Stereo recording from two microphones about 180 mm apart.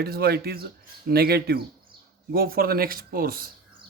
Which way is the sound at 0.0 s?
60° right (ahead or behind).